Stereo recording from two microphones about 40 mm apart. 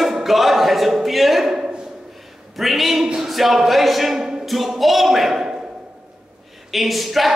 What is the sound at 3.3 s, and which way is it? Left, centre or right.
Speech, centre.